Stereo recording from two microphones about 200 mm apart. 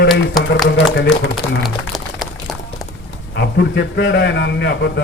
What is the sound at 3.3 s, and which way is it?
A man's voice, 60° left (ahead or behind).